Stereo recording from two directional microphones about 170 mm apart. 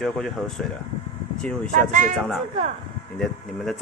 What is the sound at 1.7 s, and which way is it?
Speech, 50° right (ahead or behind).